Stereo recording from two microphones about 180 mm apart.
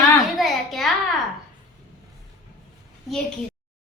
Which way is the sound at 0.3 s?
Centre (ahead or behind).